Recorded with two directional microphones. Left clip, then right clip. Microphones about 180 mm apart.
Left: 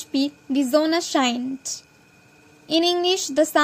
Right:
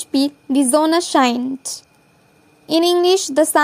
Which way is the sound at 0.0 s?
50° right (ahead or behind).